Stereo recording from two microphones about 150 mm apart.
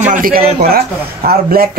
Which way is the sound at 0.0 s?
65° right (ahead or behind).